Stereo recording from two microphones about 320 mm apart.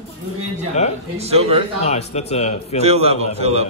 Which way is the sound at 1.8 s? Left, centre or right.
Centre.